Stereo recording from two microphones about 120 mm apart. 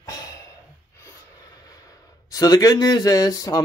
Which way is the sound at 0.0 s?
30° left (ahead or behind).